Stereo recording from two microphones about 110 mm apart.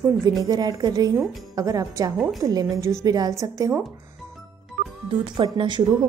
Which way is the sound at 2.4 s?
30° right (ahead or behind).